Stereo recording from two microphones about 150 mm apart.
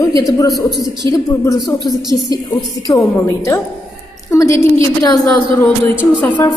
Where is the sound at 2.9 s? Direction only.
20° left (ahead or behind).